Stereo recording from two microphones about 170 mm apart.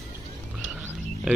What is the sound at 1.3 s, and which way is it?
Speech, 5° right (ahead or behind).